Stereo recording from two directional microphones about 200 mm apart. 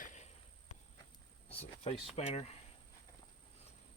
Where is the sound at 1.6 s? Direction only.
30° left (ahead or behind).